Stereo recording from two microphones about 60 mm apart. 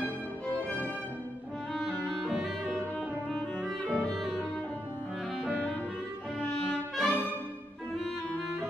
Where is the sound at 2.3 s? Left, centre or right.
Centre.